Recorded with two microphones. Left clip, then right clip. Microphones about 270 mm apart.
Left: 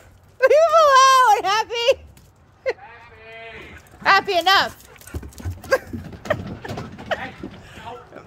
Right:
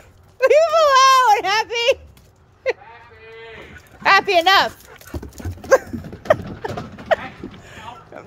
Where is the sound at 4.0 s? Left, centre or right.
Centre.